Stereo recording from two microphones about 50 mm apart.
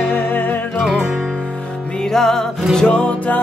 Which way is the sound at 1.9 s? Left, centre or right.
Centre.